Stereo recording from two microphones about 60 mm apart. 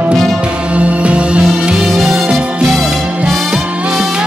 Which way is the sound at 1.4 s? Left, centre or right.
Centre.